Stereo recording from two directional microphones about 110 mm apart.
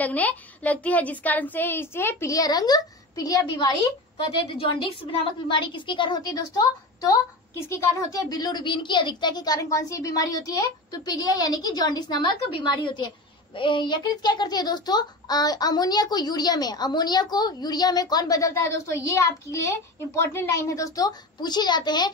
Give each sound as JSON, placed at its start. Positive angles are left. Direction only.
{"t": 0.0, "sound": "a woman's voice", "side_deg": 15}